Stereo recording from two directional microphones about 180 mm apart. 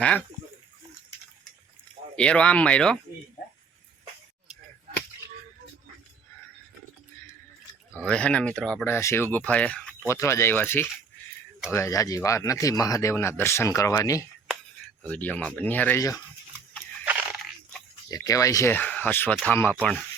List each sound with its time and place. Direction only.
2.1 s speech: 5° left (ahead or behind)
7.9 s speech: 5° left (ahead or behind)
15.0 s speech: 10° left (ahead or behind)
17.1 s a sound: 10° right (ahead or behind)
18.1 s speech: 20° left (ahead or behind)